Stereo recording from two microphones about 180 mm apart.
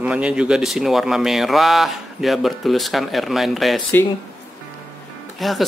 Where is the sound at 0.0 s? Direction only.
5° right (ahead or behind).